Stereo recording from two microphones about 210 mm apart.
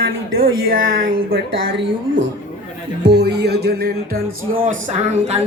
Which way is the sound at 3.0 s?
50° right (ahead or behind).